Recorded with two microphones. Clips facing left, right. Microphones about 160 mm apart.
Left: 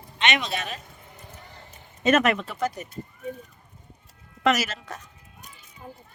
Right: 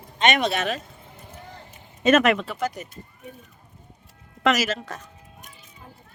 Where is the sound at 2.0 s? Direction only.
90° right.